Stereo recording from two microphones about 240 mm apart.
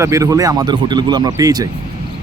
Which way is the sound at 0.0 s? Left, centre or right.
Centre.